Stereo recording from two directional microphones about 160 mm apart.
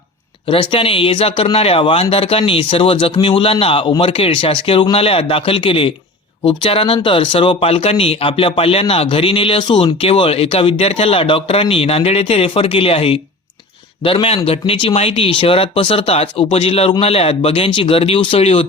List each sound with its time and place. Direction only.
0.4 s speech: 30° left (ahead or behind)